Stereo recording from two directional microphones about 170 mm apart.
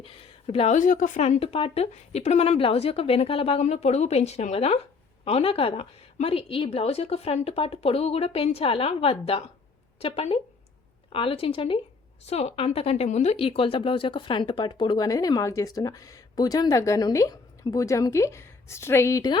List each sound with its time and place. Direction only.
0.0 s speech: 35° left (ahead or behind)